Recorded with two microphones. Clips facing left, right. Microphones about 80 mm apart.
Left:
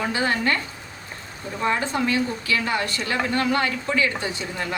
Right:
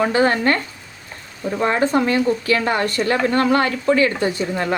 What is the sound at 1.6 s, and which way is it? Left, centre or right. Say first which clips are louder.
A woman's voice: right 5 dB; right.